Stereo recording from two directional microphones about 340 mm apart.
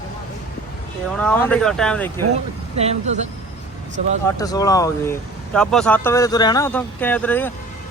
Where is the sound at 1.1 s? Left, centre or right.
Centre.